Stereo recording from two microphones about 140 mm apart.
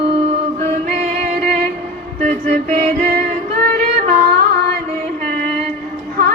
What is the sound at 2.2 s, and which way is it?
Music, 65° right (ahead or behind).